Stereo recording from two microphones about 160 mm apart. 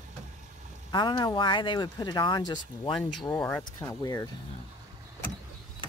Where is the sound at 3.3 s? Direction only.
15° left (ahead or behind).